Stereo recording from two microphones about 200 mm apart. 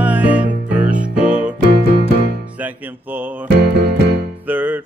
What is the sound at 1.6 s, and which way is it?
Music, 55° right (ahead or behind).